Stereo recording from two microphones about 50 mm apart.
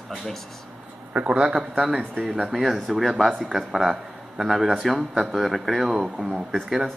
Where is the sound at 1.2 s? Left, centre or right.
Right.